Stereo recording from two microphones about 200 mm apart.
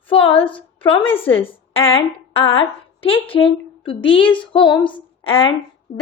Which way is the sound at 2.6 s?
25° left (ahead or behind).